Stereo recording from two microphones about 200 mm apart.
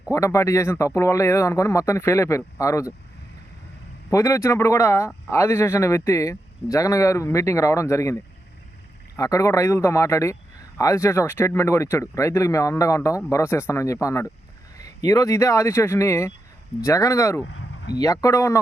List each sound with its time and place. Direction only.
0.1 s speech: 15° left (ahead or behind)
4.1 s speech: 15° left (ahead or behind)